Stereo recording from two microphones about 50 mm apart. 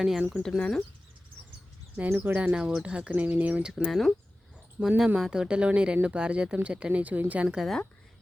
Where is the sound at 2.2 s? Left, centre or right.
Right.